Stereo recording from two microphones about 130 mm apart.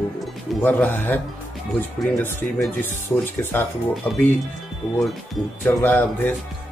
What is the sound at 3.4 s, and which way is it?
Speech, 20° left (ahead or behind).